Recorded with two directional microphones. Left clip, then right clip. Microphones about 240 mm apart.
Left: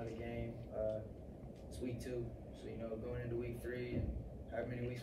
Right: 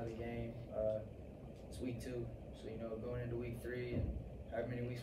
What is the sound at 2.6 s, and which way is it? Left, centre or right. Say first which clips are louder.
Speech: even; centre.